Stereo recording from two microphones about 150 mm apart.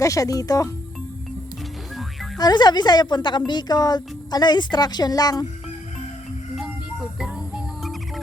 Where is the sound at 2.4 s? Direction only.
25° left (ahead or behind).